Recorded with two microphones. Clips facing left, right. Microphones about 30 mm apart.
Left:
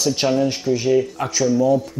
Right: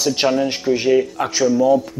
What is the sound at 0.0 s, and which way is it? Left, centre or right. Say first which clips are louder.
Speech: right 1 dB; right.